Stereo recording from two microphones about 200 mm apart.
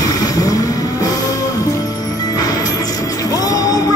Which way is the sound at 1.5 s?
15° left (ahead or behind).